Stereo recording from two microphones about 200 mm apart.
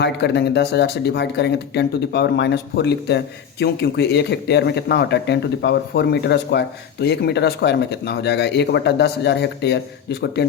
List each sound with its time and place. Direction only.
0.0 s speech: 60° left (ahead or behind)